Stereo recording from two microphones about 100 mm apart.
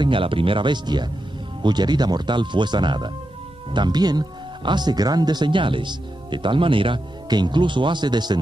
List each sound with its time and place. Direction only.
0.0 s speech: 60° right (ahead or behind)